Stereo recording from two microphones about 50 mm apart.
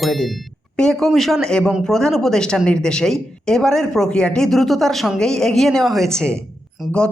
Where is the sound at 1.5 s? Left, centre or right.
Centre.